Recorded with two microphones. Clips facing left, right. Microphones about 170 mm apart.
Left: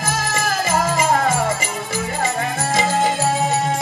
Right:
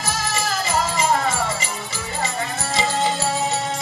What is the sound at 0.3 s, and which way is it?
Music, 50° left (ahead or behind).